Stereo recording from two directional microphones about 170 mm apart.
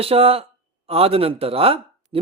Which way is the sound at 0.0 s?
35° right (ahead or behind).